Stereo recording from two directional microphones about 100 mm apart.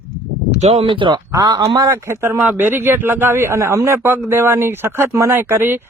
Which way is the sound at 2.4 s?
15° right (ahead or behind).